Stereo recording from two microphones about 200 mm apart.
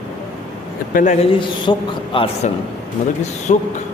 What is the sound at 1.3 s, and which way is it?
A woman's voice, 25° left (ahead or behind).